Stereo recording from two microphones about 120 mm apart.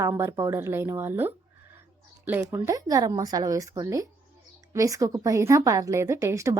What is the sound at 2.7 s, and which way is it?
A woman's voice, 30° right (ahead or behind).